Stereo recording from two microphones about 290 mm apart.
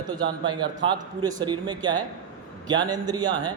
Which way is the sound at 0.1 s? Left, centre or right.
Centre.